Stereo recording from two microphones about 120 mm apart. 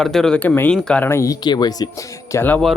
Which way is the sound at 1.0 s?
25° left (ahead or behind).